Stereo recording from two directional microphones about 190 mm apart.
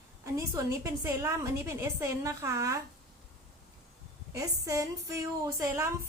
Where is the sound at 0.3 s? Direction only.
15° right (ahead or behind).